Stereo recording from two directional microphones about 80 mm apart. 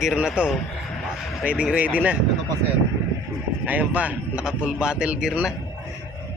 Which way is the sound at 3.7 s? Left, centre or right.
Centre.